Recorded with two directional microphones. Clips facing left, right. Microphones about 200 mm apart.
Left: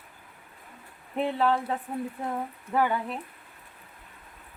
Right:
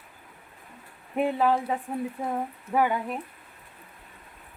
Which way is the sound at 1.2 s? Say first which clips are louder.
Right 2 dB; 10° right (ahead or behind).